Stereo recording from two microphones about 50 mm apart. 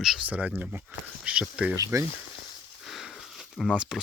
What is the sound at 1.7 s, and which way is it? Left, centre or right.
Speech, right.